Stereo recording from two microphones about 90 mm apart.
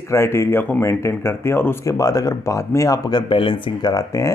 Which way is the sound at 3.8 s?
40° left (ahead or behind).